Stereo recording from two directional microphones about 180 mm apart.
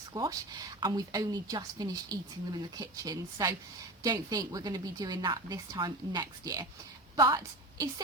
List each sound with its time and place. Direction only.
0.1 s a woman's voice: 20° right (ahead or behind)